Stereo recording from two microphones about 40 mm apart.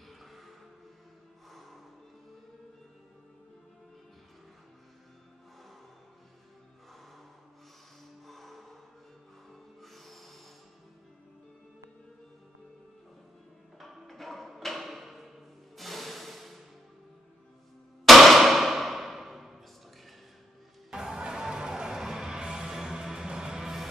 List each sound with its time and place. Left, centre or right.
0.2 s music: centre
8.3 s music: centre
13.7 s music: centre
18.0 s clang: centre
20.9 s music: centre